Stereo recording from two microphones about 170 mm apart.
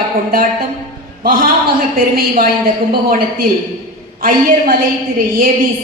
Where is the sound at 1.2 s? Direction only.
55° right (ahead or behind).